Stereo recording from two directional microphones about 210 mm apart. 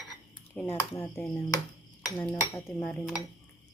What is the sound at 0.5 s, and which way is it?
Cutlery, 10° left (ahead or behind).